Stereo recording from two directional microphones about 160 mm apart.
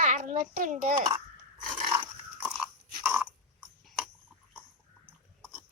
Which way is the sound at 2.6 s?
5° right (ahead or behind).